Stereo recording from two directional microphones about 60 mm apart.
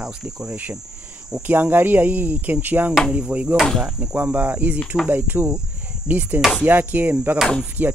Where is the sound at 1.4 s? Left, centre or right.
Right.